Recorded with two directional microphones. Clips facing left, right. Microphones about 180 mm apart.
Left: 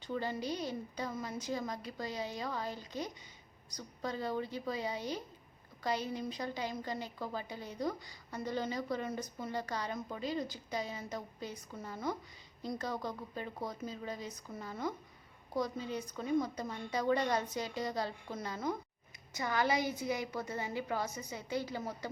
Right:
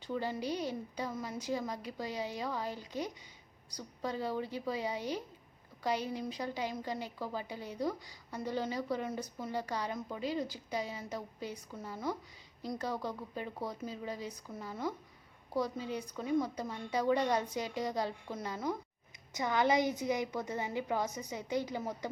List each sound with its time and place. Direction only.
0.0 s a woman's voice: 10° right (ahead or behind)